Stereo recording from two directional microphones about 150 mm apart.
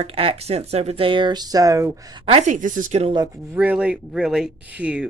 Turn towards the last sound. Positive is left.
turn(degrees=-10)  # may be behind; listen again after turning